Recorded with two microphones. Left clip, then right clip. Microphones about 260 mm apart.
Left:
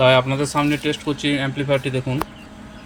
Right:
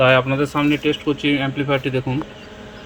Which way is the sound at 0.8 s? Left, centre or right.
Left.